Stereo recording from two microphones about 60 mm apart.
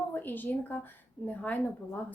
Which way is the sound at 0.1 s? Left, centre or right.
Left.